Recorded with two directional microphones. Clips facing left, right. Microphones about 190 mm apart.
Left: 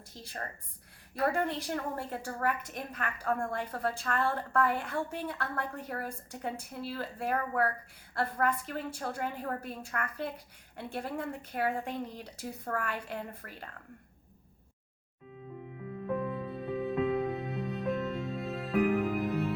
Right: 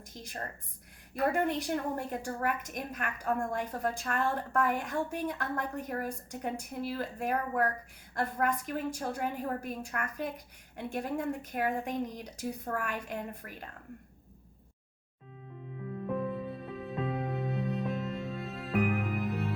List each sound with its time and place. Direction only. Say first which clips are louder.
0.1 s a woman's voice: right 1 dB; 15° right (ahead or behind)
16.6 s music: left 8 dB; centre (ahead or behind)